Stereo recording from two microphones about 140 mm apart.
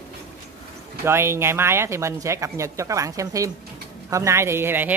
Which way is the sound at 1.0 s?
15° right (ahead or behind).